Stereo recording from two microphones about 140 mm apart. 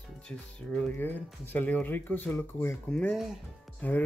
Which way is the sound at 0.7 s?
15° left (ahead or behind).